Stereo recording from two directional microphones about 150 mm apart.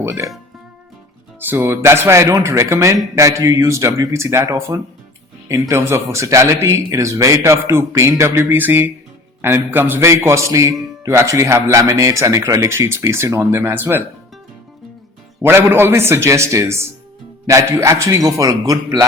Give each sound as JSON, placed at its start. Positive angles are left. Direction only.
{"t": 0.0, "sound": "speech", "side_deg": -20}
{"t": 1.4, "sound": "a man's voice", "side_deg": -15}
{"t": 15.4, "sound": "a man's voice", "side_deg": -15}